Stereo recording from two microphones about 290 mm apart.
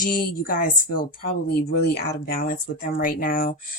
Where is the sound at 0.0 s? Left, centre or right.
Left.